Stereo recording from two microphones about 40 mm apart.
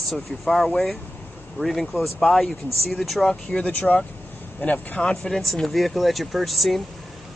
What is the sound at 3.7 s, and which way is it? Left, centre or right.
Speech, left.